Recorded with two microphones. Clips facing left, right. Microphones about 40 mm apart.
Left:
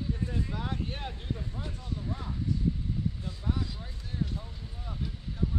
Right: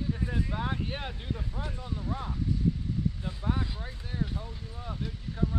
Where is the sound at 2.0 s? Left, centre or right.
Right.